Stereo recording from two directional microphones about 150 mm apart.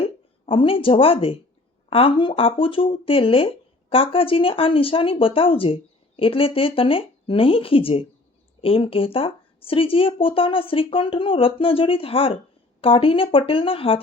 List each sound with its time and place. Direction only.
0.0 s speech: 35° left (ahead or behind)